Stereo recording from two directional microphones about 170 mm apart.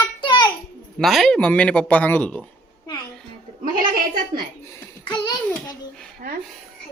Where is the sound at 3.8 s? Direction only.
60° right (ahead or behind).